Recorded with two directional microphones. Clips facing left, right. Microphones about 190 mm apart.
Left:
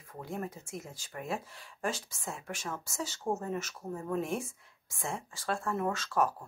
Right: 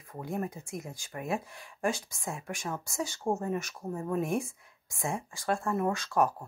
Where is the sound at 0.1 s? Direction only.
15° right (ahead or behind).